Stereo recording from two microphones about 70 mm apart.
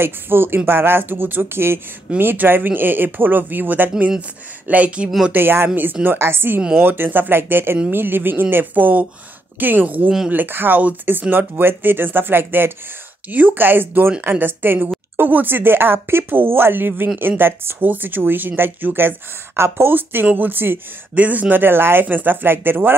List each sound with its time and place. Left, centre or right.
0.0 s speech: right
5.3 s speech: right